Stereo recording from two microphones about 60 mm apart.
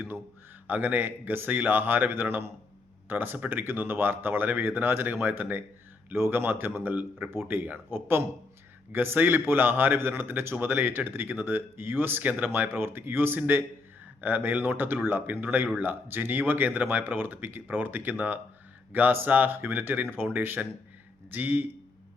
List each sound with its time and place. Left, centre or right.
0.7 s speech: right
12.2 s speech: right
12.5 s speech: right